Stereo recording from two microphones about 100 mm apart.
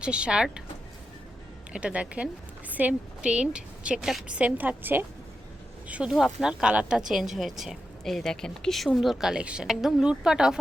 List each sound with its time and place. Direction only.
0.0 s a woman's voice: 10° right (ahead or behind)
1.7 s a woman's voice: 10° right (ahead or behind)
4.4 s a woman's voice: 15° right (ahead or behind)
5.9 s a woman's voice: 5° right (ahead or behind)